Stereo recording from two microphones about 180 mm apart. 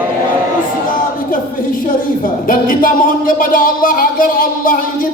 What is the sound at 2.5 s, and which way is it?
Music, 50° left (ahead or behind).